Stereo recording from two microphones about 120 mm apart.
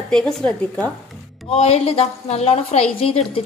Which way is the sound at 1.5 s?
60° left (ahead or behind).